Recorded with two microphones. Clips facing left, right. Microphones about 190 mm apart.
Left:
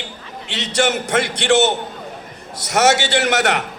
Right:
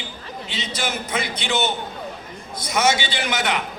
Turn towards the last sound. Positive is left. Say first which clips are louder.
# left 6 dB
turn(degrees=70)  # may be behind; listen again after turning